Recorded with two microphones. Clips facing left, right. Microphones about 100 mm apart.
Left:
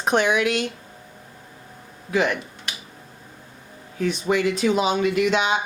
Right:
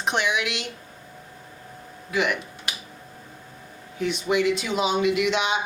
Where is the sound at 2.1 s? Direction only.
35° left (ahead or behind).